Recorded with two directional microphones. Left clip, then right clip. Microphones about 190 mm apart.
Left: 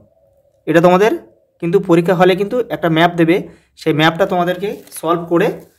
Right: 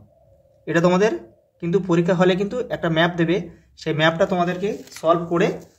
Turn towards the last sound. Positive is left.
turn(degrees=40)  # may be behind; listen again after turning